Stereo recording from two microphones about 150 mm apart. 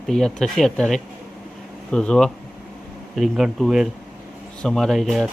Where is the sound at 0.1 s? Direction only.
5° left (ahead or behind).